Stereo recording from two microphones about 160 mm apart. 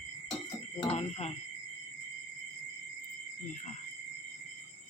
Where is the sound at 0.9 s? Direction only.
40° left (ahead or behind).